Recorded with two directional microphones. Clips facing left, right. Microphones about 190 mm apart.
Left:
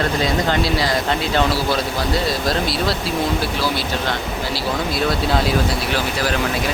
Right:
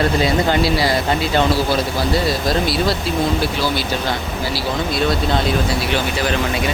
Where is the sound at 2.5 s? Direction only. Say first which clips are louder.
Right 3 dB; centre (ahead or behind).